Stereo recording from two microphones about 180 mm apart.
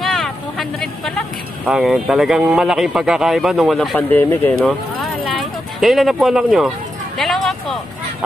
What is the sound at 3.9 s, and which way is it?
Speech, 10° left (ahead or behind).